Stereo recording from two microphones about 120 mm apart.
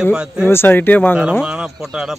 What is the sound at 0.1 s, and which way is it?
Speech, 5° right (ahead or behind).